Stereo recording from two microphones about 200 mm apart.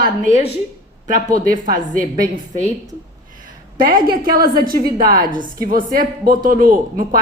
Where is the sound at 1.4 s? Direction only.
40° right (ahead or behind).